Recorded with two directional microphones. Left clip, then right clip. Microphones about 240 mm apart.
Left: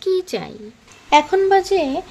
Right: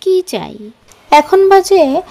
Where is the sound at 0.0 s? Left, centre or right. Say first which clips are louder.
Right 7 dB; right.